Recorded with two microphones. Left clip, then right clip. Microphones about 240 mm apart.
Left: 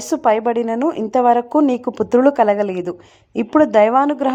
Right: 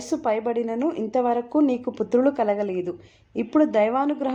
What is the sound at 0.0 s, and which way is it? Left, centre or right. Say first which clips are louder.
A woman's voice: left 8 dB; left.